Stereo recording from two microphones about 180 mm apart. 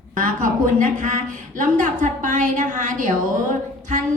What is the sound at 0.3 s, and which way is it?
A woman's voice, 50° right (ahead or behind).